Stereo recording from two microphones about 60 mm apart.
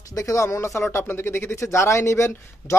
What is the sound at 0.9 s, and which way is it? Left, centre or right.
Speech, left.